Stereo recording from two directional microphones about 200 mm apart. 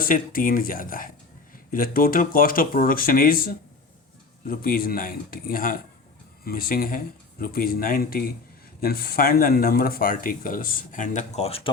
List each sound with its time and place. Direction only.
0.0 s speech: 45° left (ahead or behind)